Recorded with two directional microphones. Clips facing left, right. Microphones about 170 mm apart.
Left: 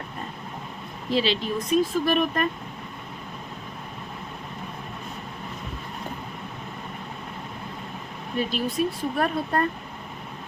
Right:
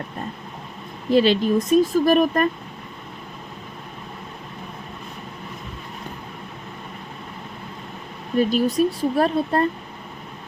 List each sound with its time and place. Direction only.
1.1 s speech: 50° right (ahead or behind)
8.4 s speech: 40° right (ahead or behind)